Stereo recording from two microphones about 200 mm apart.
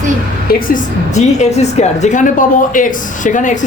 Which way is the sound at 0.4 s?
40° left (ahead or behind).